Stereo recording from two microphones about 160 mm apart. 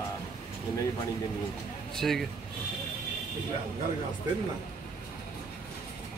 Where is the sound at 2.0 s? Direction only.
Centre (ahead or behind).